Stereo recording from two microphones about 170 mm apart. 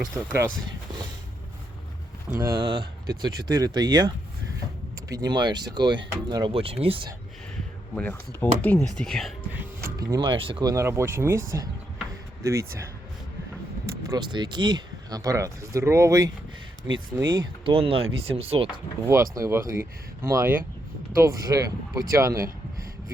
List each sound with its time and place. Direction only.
0.0 s speech: 10° right (ahead or behind)
2.4 s speech: 25° right (ahead or behind)
7.9 s speech: 10° left (ahead or behind)
9.5 s music: 10° right (ahead or behind)
10.0 s speech: 25° right (ahead or behind)
14.1 s speech: 25° right (ahead or behind)
17.3 s speech: 30° right (ahead or behind)
19.0 s speech: 15° right (ahead or behind)